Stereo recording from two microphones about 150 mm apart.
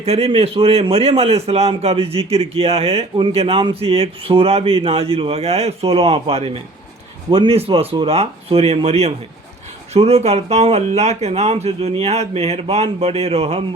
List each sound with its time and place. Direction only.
0.0 s a man's voice: 45° right (ahead or behind)